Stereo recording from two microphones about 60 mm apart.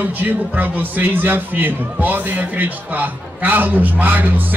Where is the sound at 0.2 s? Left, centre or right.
Right.